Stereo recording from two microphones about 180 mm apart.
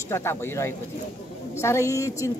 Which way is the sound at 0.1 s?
15° left (ahead or behind).